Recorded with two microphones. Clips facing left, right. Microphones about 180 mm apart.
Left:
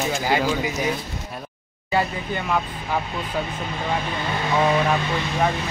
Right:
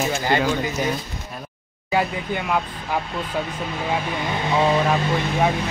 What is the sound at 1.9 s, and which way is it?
Speech, 10° right (ahead or behind).